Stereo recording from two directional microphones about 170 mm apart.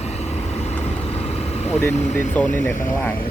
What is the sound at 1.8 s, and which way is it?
Speech, 10° left (ahead or behind).